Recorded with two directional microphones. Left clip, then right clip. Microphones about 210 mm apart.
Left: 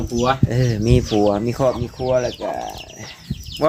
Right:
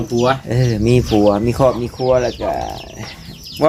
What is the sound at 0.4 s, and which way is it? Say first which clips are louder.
Speech: right 3 dB; 10° left (ahead or behind).